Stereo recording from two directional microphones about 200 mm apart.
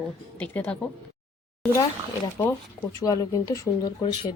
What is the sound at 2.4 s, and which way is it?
Speech, 15° left (ahead or behind).